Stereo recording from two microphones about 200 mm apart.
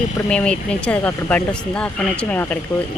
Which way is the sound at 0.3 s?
5° left (ahead or behind).